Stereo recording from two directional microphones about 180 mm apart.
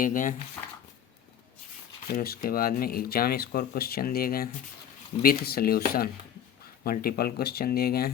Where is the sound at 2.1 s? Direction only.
55° left (ahead or behind).